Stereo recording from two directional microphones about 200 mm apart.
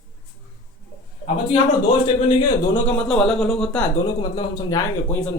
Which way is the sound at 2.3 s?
20° left (ahead or behind).